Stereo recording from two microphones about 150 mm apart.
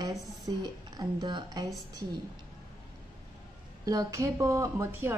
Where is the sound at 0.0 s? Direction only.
25° right (ahead or behind).